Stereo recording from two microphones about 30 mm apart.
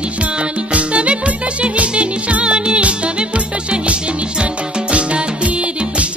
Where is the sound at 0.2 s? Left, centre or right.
Right.